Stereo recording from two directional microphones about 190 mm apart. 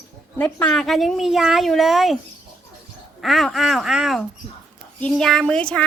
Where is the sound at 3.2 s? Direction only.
Centre (ahead or behind).